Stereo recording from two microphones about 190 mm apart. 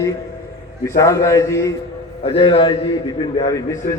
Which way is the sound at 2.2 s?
30° left (ahead or behind).